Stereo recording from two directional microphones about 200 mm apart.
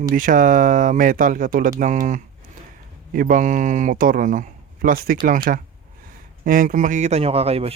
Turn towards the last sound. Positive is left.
turn(degrees=-30)  # may be behind; listen again after turning